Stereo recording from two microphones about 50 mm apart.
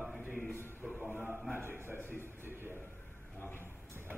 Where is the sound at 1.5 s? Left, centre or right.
Right.